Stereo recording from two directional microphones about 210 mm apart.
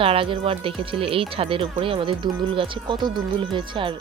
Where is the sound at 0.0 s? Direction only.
25° right (ahead or behind).